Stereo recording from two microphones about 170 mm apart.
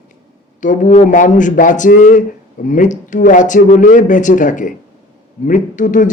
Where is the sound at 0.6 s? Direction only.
50° left (ahead or behind).